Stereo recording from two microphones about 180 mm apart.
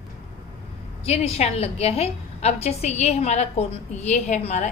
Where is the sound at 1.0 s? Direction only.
35° left (ahead or behind).